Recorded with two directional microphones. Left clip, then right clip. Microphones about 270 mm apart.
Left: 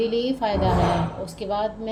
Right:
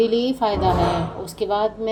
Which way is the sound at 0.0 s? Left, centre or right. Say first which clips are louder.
Right 4 dB; right.